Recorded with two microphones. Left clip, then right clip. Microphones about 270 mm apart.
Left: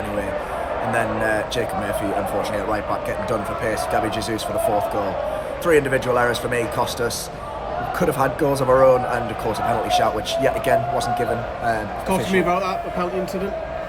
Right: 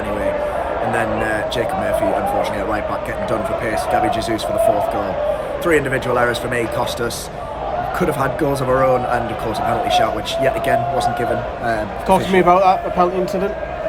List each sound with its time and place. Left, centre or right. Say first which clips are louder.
0.9 s speech: left 1 dB; centre
5.6 s speech: even; centre
12.0 s a man's voice: right 7 dB; centre